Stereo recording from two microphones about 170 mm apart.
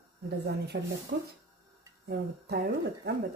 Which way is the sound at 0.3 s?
70° right (ahead or behind).